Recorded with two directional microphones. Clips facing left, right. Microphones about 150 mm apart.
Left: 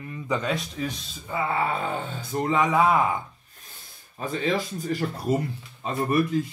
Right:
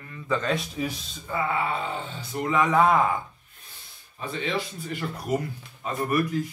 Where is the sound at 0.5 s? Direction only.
5° right (ahead or behind).